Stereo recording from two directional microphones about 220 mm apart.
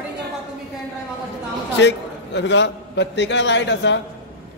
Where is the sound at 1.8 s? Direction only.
50° left (ahead or behind).